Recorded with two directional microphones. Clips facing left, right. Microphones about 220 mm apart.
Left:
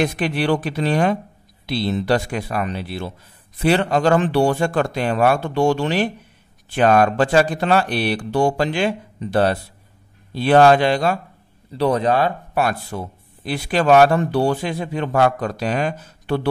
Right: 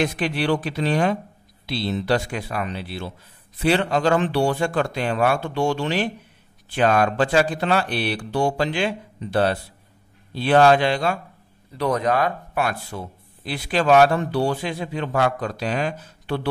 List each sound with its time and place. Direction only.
0.0 s speech: 50° left (ahead or behind)
11.7 s speech: 30° left (ahead or behind); by 16.3 s 45° left (ahead or behind)